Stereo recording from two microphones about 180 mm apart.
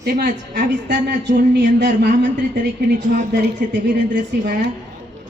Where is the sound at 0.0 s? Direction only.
55° right (ahead or behind).